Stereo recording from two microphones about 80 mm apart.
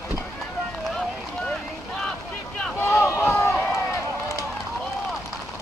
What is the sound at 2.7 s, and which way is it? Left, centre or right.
Boat, left.